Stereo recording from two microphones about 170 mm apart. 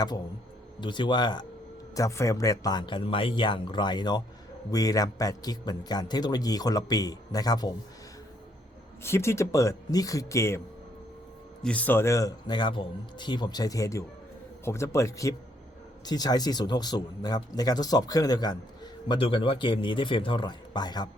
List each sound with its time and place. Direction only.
0.8 s a man's voice: 25° left (ahead or behind)
9.0 s speech: 15° left (ahead or behind)
11.6 s a man's voice: 10° left (ahead or behind); by 21.1 s 25° left (ahead or behind)